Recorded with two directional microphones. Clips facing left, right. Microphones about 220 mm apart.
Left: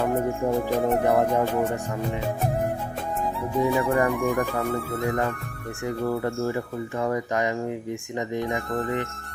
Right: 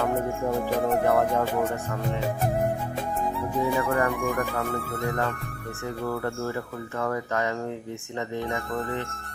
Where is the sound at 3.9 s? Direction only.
15° left (ahead or behind).